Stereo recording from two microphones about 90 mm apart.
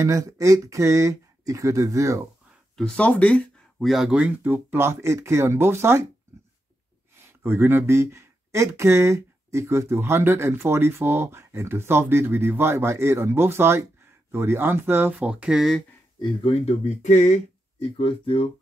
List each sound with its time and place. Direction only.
0.0 s speech: 35° right (ahead or behind)
2.7 s speech: 10° left (ahead or behind)
3.8 s speech: centre (ahead or behind)
4.4 s speech: 20° right (ahead or behind)
7.2 s speech: 25° right (ahead or behind)
15.1 s speech: 15° right (ahead or behind)
17.7 s speech: 90° left